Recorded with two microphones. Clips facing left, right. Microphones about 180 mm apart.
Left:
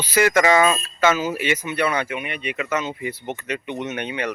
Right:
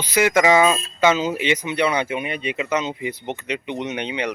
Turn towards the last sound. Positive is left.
turn(degrees=-15)  # may be behind; listen again after turning